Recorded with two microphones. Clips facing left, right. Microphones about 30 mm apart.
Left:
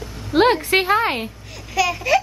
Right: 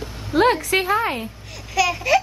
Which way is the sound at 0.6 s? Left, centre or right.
Left.